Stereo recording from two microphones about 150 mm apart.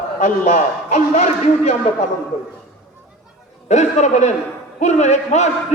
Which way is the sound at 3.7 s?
50° left (ahead or behind).